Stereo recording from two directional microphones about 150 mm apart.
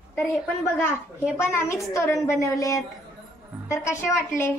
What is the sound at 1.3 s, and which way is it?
A child's voice, 15° left (ahead or behind).